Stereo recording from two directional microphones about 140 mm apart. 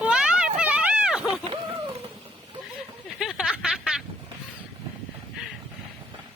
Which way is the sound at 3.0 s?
5° right (ahead or behind).